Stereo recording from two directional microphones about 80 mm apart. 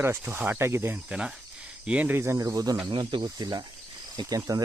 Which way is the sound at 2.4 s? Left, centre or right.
Right.